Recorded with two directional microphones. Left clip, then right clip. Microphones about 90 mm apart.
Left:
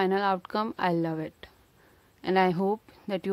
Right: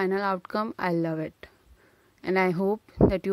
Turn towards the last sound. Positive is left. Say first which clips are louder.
# right 10 dB
turn(degrees=-35)  # may be behind; listen again after turning